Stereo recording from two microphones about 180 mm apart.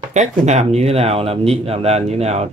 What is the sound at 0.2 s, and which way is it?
Speech, 40° right (ahead or behind).